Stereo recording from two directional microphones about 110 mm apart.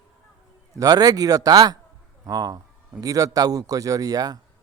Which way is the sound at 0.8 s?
35° right (ahead or behind).